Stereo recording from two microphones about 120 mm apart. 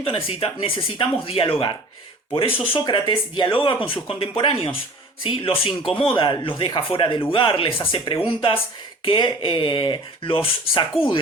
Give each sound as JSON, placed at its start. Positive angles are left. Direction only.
{"t": 0.0, "sound": "speech", "side_deg": 50}